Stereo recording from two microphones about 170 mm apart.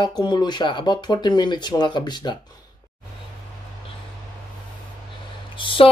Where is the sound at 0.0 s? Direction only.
25° left (ahead or behind).